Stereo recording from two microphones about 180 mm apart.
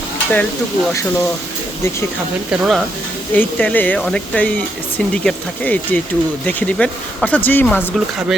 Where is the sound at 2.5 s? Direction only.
Centre (ahead or behind).